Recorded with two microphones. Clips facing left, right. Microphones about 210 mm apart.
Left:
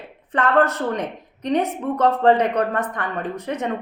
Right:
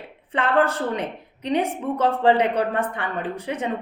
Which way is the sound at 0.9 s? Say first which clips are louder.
Left 1 dB; 10° right (ahead or behind).